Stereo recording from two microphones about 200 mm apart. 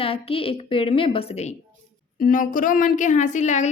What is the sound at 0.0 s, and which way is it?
A woman's voice, 30° left (ahead or behind).